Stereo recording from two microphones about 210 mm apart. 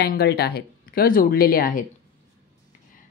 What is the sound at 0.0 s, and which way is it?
Speech, 50° left (ahead or behind).